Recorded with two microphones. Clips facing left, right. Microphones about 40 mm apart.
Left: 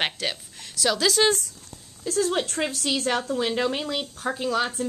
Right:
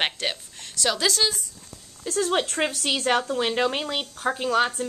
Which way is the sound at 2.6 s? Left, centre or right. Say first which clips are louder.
Right 1 dB; right.